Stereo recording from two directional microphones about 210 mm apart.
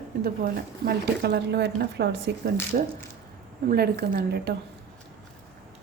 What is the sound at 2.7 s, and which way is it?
Speech, 40° right (ahead or behind).